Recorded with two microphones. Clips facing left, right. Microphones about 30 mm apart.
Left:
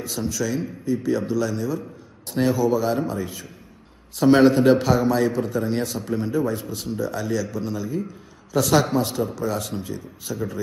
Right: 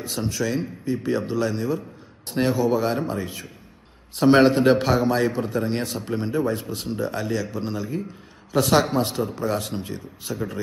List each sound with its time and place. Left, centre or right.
0.0 s a man's voice: right
2.3 s a man's voice: right
4.2 s a man's voice: right